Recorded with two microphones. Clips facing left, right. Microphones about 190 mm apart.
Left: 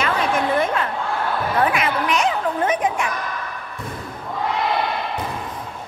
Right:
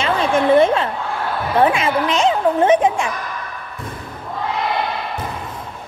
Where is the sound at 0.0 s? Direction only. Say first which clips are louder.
Right 4 dB; 25° right (ahead or behind).